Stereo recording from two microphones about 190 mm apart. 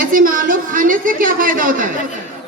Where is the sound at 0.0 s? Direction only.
45° right (ahead or behind).